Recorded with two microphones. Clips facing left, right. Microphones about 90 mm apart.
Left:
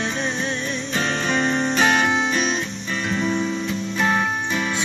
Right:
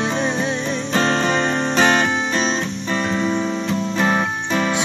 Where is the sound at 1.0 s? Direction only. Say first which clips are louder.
Right 4 dB; 45° right (ahead or behind).